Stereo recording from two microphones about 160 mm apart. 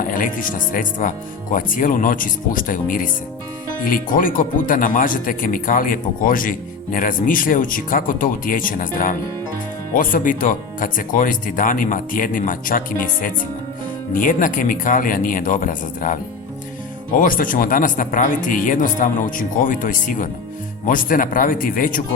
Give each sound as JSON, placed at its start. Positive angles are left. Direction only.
{"t": 0.1, "sound": "speech", "side_deg": 55}